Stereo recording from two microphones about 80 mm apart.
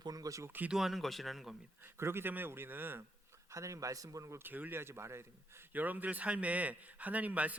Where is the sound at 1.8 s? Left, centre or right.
Right.